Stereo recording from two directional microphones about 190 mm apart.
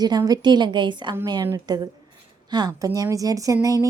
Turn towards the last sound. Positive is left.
turn(degrees=-20)  # may be behind; listen again after turning